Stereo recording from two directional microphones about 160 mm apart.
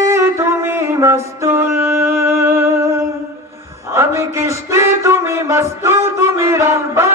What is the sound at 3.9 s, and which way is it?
Mantra, 15° right (ahead or behind).